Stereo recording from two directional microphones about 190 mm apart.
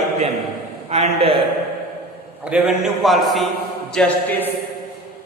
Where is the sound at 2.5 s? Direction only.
Centre (ahead or behind).